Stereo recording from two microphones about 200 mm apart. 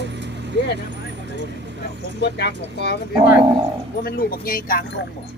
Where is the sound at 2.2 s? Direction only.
55° left (ahead or behind).